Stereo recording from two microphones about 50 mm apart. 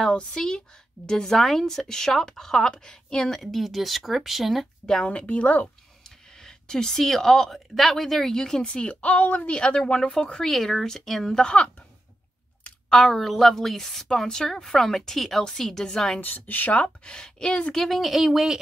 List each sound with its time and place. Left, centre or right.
0.1 s a woman's voice: centre
4.8 s speech: centre
6.0 s a woman's voice: centre
12.9 s speech: centre
14.0 s a woman's voice: centre
16.2 s speech: left
16.8 s a woman's voice: centre
17.7 s speech: centre